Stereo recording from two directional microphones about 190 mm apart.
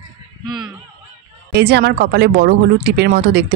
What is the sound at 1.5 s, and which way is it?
Speech, 60° right (ahead or behind).